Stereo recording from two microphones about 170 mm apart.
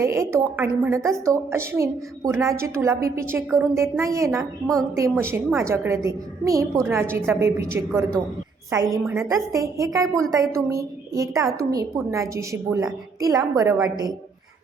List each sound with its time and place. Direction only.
0.0 s a woman's voice: 15° right (ahead or behind)